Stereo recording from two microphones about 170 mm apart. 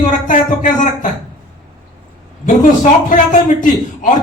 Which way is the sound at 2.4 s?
45° left (ahead or behind).